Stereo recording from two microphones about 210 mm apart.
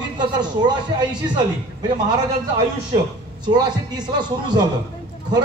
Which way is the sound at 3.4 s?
20° right (ahead or behind).